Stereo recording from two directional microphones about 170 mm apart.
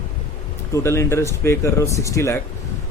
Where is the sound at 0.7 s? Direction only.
15° left (ahead or behind).